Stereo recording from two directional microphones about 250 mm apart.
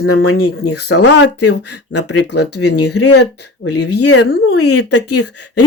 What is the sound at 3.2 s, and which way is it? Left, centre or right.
Speech, left.